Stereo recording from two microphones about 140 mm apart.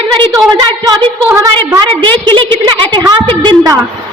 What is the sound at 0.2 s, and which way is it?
A woman's voice, 25° right (ahead or behind).